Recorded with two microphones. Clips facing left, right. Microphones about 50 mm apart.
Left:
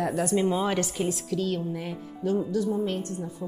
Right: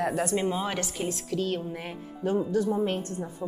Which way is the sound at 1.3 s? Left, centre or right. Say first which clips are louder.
Left 1 dB; centre.